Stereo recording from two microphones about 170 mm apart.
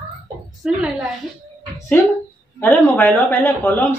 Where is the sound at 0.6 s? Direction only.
Centre (ahead or behind).